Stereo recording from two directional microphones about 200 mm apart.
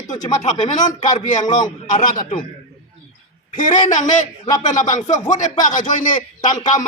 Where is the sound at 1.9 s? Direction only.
40° left (ahead or behind).